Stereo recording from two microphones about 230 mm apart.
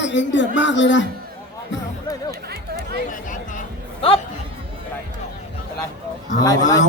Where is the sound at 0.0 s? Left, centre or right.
Left.